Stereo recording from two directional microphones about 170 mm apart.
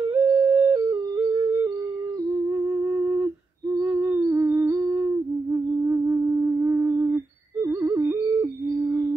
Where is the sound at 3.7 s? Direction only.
15° right (ahead or behind).